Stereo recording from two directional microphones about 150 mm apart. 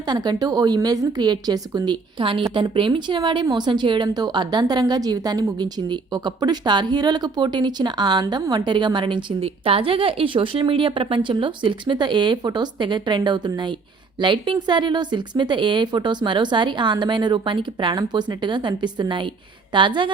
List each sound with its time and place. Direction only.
0.0 s a woman's voice: 25° right (ahead or behind)